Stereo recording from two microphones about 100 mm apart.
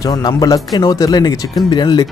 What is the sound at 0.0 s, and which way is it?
Speech, 45° left (ahead or behind).